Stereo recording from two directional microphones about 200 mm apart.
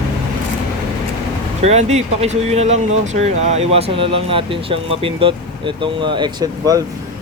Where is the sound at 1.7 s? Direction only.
35° right (ahead or behind).